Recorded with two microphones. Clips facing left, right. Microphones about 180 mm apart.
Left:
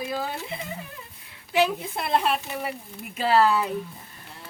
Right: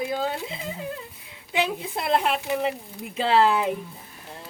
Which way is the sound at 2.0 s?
20° right (ahead or behind).